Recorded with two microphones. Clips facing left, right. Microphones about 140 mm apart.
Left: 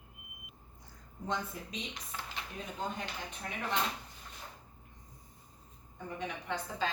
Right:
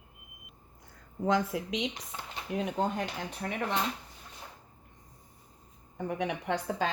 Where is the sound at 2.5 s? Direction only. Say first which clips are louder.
Right 10 dB; 75° right (ahead or behind).